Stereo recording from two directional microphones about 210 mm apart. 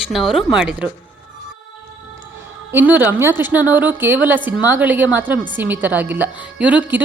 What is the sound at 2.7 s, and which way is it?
A woman's voice, 10° right (ahead or behind).